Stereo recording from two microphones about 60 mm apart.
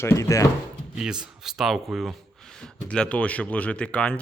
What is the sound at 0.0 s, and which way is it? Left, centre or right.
Speech, left.